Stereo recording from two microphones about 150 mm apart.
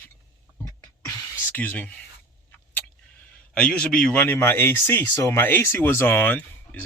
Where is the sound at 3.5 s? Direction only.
5° left (ahead or behind).